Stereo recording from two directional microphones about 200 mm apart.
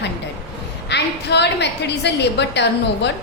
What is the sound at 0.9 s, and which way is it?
A woman's voice, 60° left (ahead or behind).